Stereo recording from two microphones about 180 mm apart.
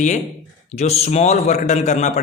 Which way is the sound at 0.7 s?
35° left (ahead or behind).